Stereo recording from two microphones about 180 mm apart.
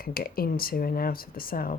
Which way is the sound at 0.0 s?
55° left (ahead or behind).